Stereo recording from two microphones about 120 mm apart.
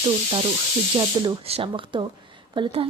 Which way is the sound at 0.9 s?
35° right (ahead or behind).